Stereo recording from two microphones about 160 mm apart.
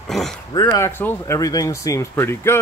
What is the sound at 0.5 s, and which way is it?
Speech, 20° left (ahead or behind).